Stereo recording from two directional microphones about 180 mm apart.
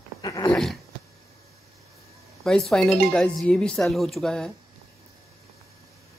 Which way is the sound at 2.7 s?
5° left (ahead or behind).